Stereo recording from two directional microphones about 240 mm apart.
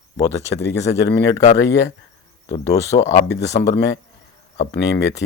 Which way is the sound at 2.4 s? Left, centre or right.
Centre.